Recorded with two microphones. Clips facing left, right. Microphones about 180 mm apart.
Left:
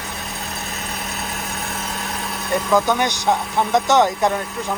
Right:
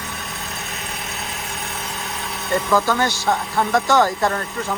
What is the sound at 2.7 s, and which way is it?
Speech, 20° left (ahead or behind).